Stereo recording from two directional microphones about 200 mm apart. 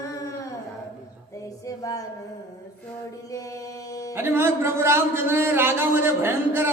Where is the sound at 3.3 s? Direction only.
15° left (ahead or behind).